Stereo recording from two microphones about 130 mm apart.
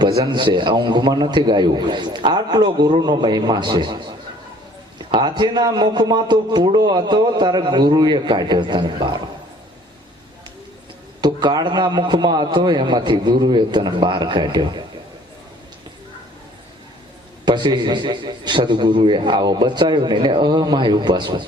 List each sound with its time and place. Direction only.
0.0 s a man's voice: 30° right (ahead or behind)
11.2 s a man's voice: 35° right (ahead or behind)
17.4 s a man's voice: 35° right (ahead or behind)